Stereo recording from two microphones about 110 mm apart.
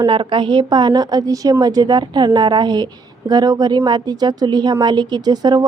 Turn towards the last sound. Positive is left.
turn(degrees=-35)  # may be behind; listen again after turning